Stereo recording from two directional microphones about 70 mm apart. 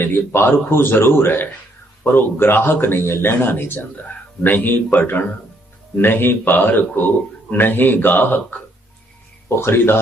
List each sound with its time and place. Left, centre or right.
0.0 s a man's voice: left
9.6 s speech: left